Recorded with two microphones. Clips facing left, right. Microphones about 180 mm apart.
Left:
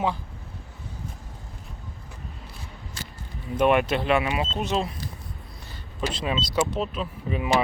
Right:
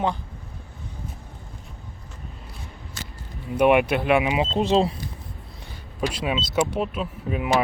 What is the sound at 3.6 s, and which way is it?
Speech, 10° right (ahead or behind).